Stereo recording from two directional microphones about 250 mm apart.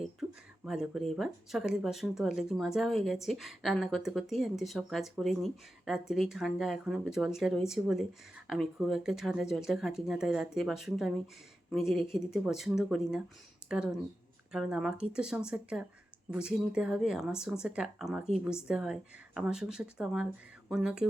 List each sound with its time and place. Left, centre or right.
0.0 s speech: centre